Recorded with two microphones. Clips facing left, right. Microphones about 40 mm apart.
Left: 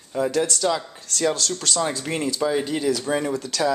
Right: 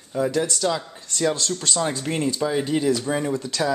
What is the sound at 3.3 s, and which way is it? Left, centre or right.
Speech, right.